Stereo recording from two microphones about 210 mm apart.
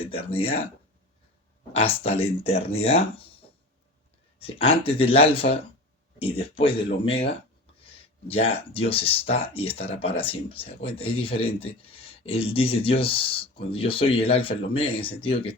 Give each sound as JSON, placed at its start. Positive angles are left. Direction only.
{"t": 0.0, "sound": "speech", "side_deg": 25}
{"t": 1.7, "sound": "speech", "side_deg": 25}
{"t": 4.4, "sound": "speech", "side_deg": 25}
{"t": 8.3, "sound": "speech", "side_deg": 25}